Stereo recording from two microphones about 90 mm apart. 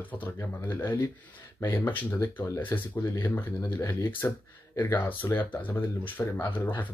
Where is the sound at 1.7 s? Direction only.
25° left (ahead or behind).